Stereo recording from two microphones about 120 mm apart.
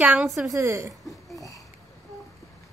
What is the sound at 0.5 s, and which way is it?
Speech, 25° right (ahead or behind).